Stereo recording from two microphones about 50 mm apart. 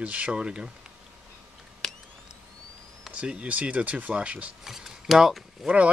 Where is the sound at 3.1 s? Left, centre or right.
Right.